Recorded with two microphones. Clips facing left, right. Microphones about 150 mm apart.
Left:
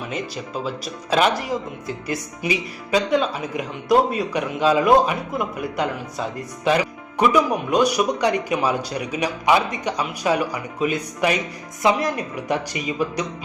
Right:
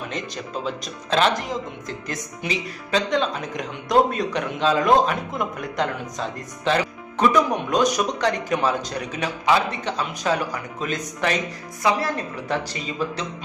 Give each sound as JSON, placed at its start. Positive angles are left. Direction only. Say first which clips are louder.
{"t": 1.1, "sound": "speech", "louder": "left 1 dB", "side_deg": 10}